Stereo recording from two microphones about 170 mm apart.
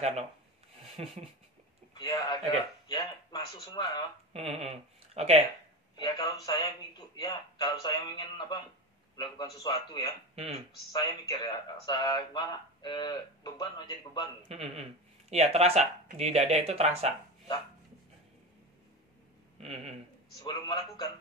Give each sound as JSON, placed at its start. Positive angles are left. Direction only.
{"t": 2.0, "sound": "speech", "side_deg": 25}
{"t": 4.3, "sound": "speech", "side_deg": -35}
{"t": 5.9, "sound": "speech", "side_deg": 20}
{"t": 14.5, "sound": "speech", "side_deg": -35}
{"t": 19.6, "sound": "speech", "side_deg": -35}
{"t": 20.3, "sound": "speech", "side_deg": 25}